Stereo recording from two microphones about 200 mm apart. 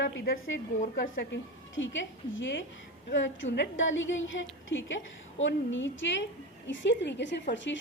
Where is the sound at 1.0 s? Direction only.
45° left (ahead or behind).